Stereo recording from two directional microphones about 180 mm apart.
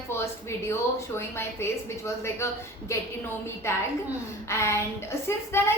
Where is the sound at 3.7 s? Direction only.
15° left (ahead or behind).